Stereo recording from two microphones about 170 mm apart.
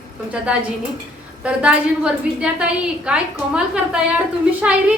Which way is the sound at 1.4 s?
5° right (ahead or behind).